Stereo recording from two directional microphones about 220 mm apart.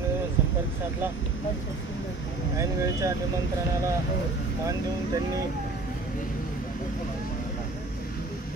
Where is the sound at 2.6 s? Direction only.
15° right (ahead or behind).